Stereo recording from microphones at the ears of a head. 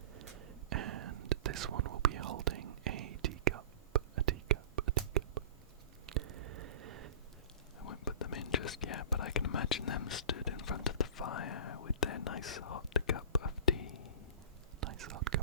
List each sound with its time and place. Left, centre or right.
0.1 s whispering: right
6.1 s a sound: right
7.8 s whispering: left
14.8 s whispering: right